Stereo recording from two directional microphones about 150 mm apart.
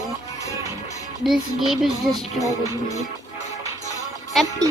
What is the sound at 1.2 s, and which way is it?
A child's voice, centre (ahead or behind).